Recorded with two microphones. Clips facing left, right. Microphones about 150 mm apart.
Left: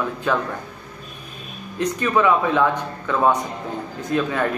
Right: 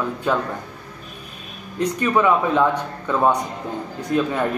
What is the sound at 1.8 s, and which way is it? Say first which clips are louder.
A man's voice: right 1 dB; 15° right (ahead or behind).